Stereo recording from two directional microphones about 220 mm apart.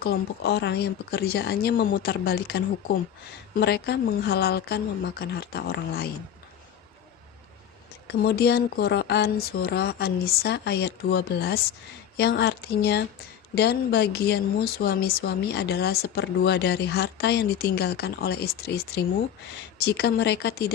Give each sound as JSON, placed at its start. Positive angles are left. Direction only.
{"t": 0.0, "sound": "speech", "side_deg": 45}
{"t": 8.0, "sound": "speech", "side_deg": 45}